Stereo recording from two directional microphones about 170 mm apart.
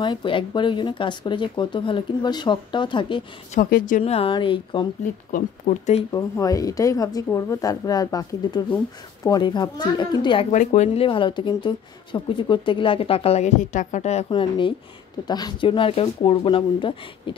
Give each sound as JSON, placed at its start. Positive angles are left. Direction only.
{"t": 0.0, "sound": "speech", "side_deg": 30}
{"t": 3.7, "sound": "speech", "side_deg": 50}
{"t": 4.0, "sound": "speech", "side_deg": 35}
{"t": 5.3, "sound": "speech", "side_deg": 45}
{"t": 6.1, "sound": "speech", "side_deg": 20}
{"t": 10.5, "sound": "speech", "side_deg": 45}
{"t": 14.3, "sound": "speech", "side_deg": 30}